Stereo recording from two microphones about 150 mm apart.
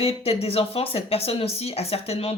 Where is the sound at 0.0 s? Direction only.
40° left (ahead or behind).